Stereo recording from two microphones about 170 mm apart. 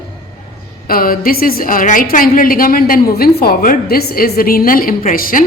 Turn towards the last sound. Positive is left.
turn(degrees=55)  # may be behind; listen again after turning